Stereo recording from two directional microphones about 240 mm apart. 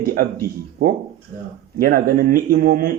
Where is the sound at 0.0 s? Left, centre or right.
Right.